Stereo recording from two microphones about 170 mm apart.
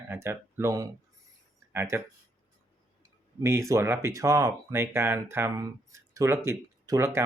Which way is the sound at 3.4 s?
15° right (ahead or behind).